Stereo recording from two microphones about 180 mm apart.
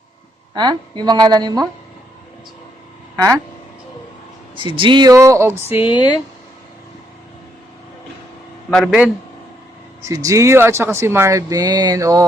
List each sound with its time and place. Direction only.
0.5 s a woman's voice: 25° right (ahead or behind)
3.2 s speech: 15° right (ahead or behind)
4.5 s a woman's voice: 25° right (ahead or behind)
5.8 s speech: 25° left (ahead or behind)
8.7 s a man's voice: centre (ahead or behind)
10.0 s speech: 20° right (ahead or behind)